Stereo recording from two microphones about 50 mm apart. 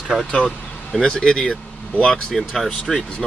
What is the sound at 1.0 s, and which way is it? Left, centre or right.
Speech, centre.